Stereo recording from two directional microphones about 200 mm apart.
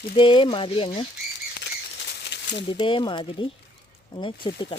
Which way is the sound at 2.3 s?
60° left (ahead or behind).